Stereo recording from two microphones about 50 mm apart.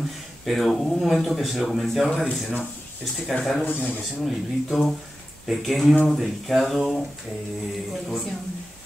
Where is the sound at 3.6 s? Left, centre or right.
Left.